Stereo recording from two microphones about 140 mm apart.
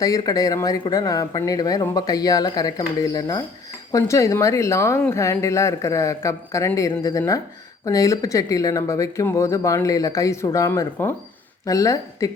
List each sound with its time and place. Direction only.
0.0 s speech: 25° left (ahead or behind)